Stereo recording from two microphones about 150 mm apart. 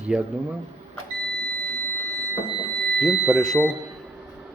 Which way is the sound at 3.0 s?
Centre (ahead or behind).